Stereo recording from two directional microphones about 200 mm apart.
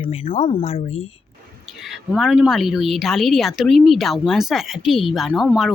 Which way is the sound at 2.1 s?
Centre (ahead or behind).